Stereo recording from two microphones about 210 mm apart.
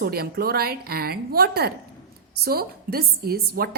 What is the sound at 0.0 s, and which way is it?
A woman's voice, 50° right (ahead or behind).